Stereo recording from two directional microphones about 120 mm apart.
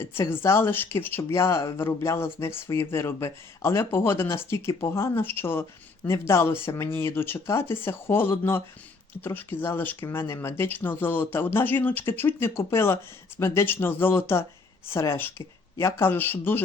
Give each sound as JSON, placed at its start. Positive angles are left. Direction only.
{"t": 0.0, "sound": "speech", "side_deg": 20}